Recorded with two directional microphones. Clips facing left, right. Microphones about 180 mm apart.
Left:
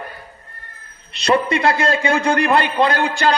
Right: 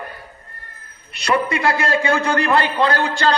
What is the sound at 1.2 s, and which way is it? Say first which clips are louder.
A man's voice: left 2 dB; 25° left (ahead or behind).